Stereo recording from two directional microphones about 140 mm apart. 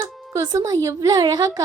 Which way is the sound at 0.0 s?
25° right (ahead or behind).